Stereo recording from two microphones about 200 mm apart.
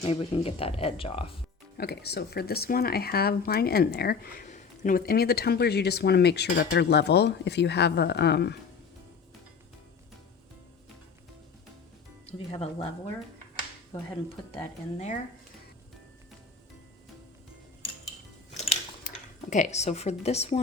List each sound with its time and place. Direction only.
0.0 s speech: 30° left (ahead or behind)
1.8 s speech: 55° left (ahead or behind)
12.5 s speech: 30° left (ahead or behind)
18.5 s music: 30° left (ahead or behind)
19.0 s speech: 35° left (ahead or behind)